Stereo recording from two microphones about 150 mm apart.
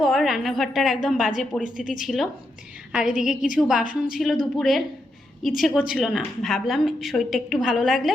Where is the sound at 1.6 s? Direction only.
60° left (ahead or behind).